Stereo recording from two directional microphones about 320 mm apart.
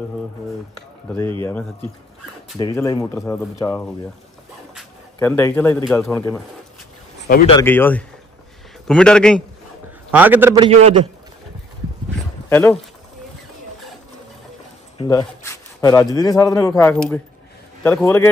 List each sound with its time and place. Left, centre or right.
1.4 s a man's voice: centre
7.2 s a man's voice: left
7.5 s a man's voice: centre
12.4 s speech: centre
15.0 s a man's voice: centre